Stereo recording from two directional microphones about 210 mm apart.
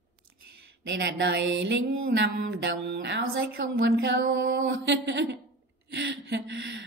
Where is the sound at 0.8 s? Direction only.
60° right (ahead or behind).